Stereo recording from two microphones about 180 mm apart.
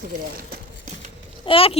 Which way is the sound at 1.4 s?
30° left (ahead or behind).